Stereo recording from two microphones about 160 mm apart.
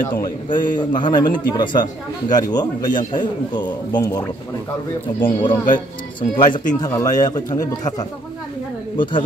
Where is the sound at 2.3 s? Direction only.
25° left (ahead or behind).